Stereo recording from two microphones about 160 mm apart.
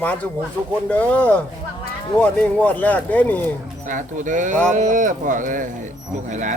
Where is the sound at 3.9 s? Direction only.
50° right (ahead or behind).